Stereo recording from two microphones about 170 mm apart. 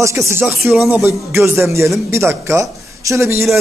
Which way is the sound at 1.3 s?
15° right (ahead or behind).